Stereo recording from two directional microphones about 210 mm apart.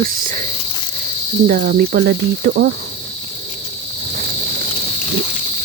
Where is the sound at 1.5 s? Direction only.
45° right (ahead or behind).